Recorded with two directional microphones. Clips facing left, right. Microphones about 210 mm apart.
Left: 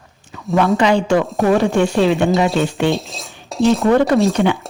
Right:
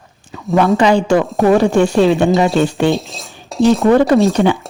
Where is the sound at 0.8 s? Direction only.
35° right (ahead or behind).